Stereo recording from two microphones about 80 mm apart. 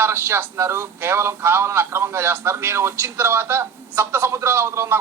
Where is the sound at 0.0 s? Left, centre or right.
Right.